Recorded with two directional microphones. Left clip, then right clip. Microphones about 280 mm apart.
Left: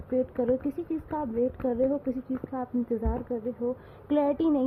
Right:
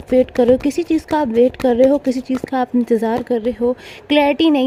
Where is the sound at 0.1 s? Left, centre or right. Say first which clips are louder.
Right 14 dB; right.